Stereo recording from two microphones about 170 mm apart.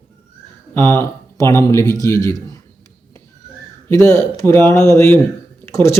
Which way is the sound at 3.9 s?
20° left (ahead or behind).